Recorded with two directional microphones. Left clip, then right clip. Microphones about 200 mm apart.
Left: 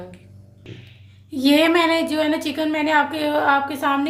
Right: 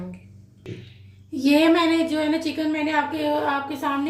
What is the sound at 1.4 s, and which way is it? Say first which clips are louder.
A woman's voice: left 2 dB; 40° left (ahead or behind).